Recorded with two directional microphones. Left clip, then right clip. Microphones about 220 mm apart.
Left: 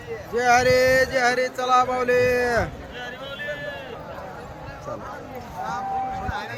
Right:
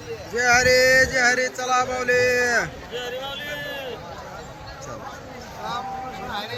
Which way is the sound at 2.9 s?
15° right (ahead or behind).